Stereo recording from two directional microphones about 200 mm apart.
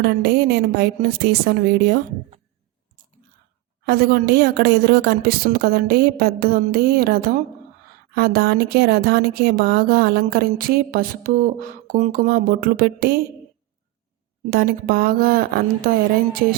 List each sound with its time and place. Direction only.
0.0 s speech: 50° right (ahead or behind)
3.8 s speech: 50° right (ahead or behind)
14.5 s speech: 50° right (ahead or behind)